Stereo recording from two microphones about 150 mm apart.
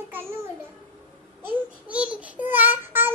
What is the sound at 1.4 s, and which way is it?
A woman's voice, 10° right (ahead or behind).